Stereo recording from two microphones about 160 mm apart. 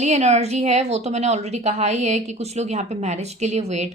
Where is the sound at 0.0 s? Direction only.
45° right (ahead or behind).